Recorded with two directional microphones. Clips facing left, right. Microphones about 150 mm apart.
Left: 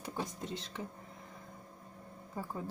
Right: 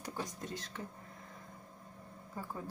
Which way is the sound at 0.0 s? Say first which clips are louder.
Left 2 dB; 25° left (ahead or behind).